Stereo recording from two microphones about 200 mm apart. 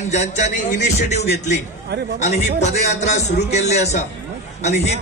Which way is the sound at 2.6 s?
35° left (ahead or behind).